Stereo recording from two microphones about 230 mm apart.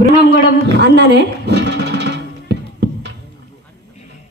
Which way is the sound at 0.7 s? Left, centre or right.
Right.